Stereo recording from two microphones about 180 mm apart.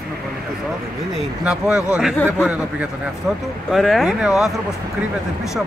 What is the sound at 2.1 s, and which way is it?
Speech, 10° left (ahead or behind).